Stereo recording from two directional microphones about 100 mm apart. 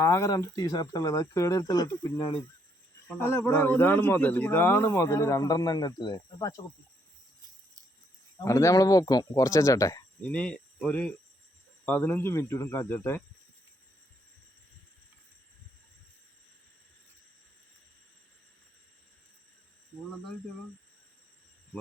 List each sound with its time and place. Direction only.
0.0 s speech: 30° left (ahead or behind)
3.1 s a man's voice: 20° left (ahead or behind); by 6.5 s 45° left (ahead or behind)
8.4 s speech: 30° left (ahead or behind)
10.2 s a man's voice: 15° left (ahead or behind)